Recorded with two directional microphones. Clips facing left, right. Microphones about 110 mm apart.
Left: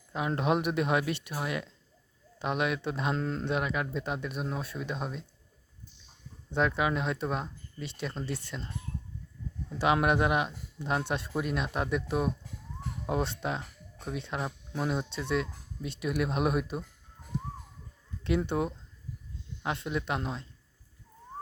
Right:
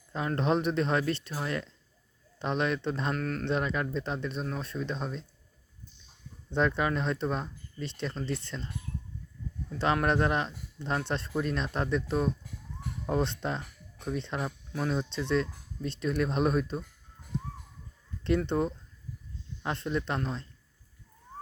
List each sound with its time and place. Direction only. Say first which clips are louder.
0.1 s speech: even; 10° left (ahead or behind)
3.2 s speech: even; 25° left (ahead or behind)
3.4 s speech: right 1 dB; 5° left (ahead or behind)
6.5 s speech: even; 5° left (ahead or behind)
18.2 s speech: right 2 dB; 5° left (ahead or behind)